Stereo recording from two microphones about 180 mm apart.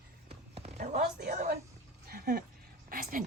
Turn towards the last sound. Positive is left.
turn(degrees=-50)  # may be behind; listen again after turning